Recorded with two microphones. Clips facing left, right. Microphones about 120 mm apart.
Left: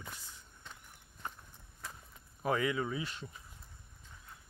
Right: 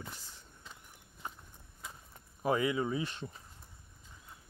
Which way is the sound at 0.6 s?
5° right (ahead or behind).